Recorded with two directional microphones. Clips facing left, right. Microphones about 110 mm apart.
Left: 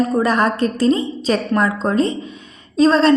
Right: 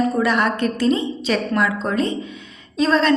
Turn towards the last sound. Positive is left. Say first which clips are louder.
# left 4 dB
turn(degrees=35)  # may be behind; listen again after turning